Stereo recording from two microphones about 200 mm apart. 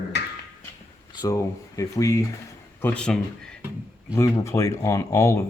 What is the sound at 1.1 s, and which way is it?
Speech, 20° left (ahead or behind).